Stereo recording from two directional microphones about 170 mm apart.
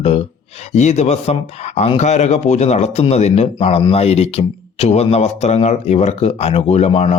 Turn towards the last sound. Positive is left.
turn(degrees=40)  # may be behind; listen again after turning